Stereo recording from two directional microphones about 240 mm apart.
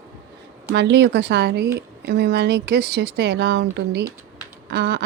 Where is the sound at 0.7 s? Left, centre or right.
Right.